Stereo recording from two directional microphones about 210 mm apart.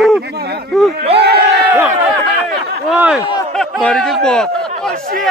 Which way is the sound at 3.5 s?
5° left (ahead or behind).